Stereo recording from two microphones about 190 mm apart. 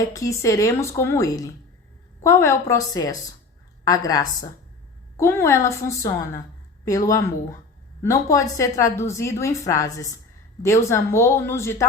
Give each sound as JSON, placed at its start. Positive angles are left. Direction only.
{"t": 0.1, "sound": "a woman's voice", "side_deg": 15}